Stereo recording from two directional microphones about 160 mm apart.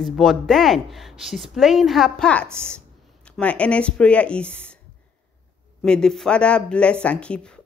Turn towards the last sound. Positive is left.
turn(degrees=5)  # may be behind; listen again after turning